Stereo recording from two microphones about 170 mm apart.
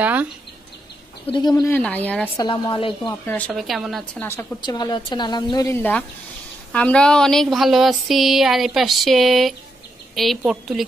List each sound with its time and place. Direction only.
0.0 s speech: 10° right (ahead or behind)
1.3 s a woman's voice: 20° left (ahead or behind)
1.8 s speech: 10° left (ahead or behind)
2.3 s a woman's voice: 25° left (ahead or behind)
3.1 s speech: 15° left (ahead or behind)
3.5 s speech: centre (ahead or behind)
4.2 s speech: 15° left (ahead or behind)
4.6 s a woman's voice: 25° left (ahead or behind); by 10.9 s centre (ahead or behind)